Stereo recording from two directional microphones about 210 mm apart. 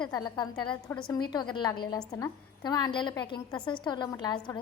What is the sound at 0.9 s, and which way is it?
Speech, 5° left (ahead or behind).